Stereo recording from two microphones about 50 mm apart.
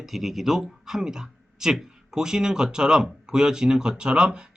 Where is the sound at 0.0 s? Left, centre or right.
Centre.